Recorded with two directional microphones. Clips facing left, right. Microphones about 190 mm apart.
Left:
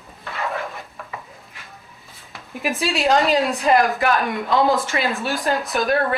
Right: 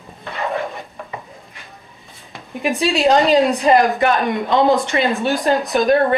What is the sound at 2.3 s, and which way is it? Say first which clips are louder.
Speech: right 4 dB; centre (ahead or behind).